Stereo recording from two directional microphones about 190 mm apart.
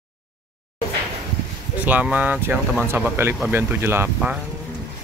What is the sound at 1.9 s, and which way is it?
Speech, 10° right (ahead or behind).